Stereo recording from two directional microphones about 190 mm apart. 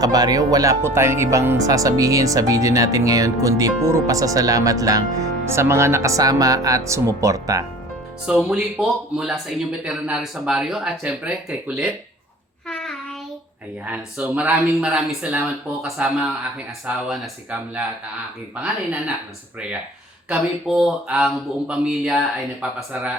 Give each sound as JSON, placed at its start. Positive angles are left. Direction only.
{"t": 0.0, "sound": "speech", "side_deg": -20}
{"t": 8.3, "sound": "a man's voice", "side_deg": -5}
{"t": 12.6, "sound": "child singing", "side_deg": 5}
{"t": 13.8, "sound": "speech", "side_deg": -10}
{"t": 14.8, "sound": "a man's voice", "side_deg": 0}
{"t": 20.3, "sound": "a man's voice", "side_deg": -5}